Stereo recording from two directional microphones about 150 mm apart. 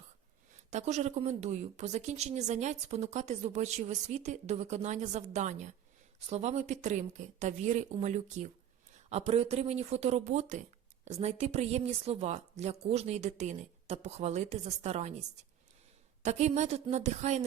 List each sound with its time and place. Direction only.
0.7 s speech: 50° right (ahead or behind)
16.2 s speech: 50° right (ahead or behind)